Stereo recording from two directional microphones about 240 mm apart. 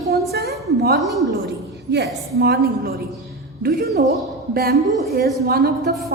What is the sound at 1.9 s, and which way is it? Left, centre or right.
A woman's voice, right.